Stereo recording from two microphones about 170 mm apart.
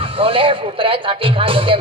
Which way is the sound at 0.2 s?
30° right (ahead or behind).